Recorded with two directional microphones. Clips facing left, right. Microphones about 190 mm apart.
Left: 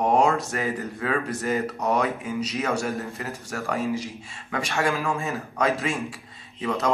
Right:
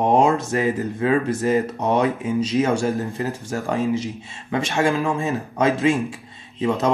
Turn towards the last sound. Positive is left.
turn(degrees=-30)  # may be behind; listen again after turning